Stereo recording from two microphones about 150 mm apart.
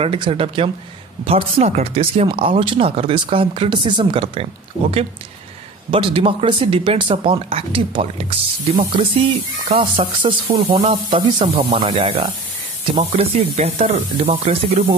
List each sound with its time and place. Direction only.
0.0 s speech: 40° right (ahead or behind)
5.9 s speech: 35° right (ahead or behind)